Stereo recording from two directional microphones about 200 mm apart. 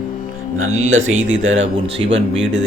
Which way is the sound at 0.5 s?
90° right.